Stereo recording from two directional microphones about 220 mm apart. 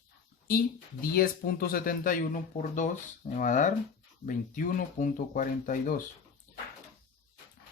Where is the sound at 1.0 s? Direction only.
40° left (ahead or behind).